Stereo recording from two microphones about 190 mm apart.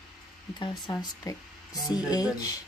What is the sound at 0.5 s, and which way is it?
Speech, 25° left (ahead or behind).